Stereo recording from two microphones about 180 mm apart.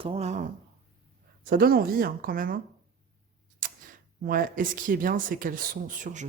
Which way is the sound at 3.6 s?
50° right (ahead or behind).